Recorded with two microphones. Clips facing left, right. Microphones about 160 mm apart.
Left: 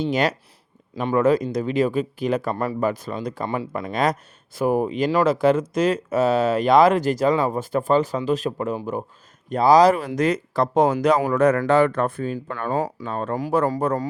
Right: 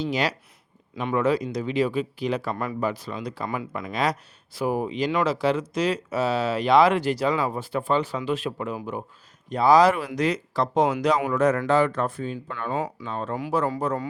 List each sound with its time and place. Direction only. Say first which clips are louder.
0.0 s speech: left 4 dB; 50° left (ahead or behind)
3.4 s speech: left 3 dB; 30° left (ahead or behind)
3.9 s speech: left 3 dB; 50° left (ahead or behind)